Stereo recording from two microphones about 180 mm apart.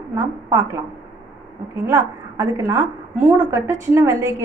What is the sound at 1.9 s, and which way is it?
A woman's voice, 15° right (ahead or behind).